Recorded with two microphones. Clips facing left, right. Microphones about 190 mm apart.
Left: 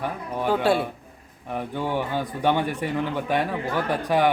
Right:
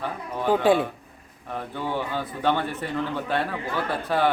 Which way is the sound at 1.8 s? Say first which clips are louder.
Left 2 dB; 15° left (ahead or behind).